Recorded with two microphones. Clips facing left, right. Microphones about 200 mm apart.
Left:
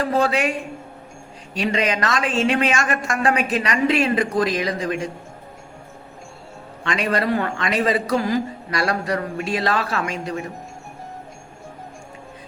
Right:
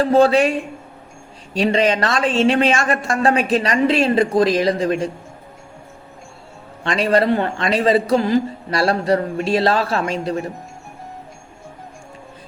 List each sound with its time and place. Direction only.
0.0 s a woman's voice: 30° right (ahead or behind)
1.5 s a woman's voice: 30° right (ahead or behind)
6.8 s a man's voice: 30° right (ahead or behind)